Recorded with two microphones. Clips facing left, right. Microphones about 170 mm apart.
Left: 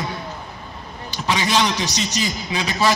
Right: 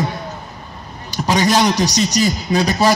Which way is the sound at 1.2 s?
40° right (ahead or behind).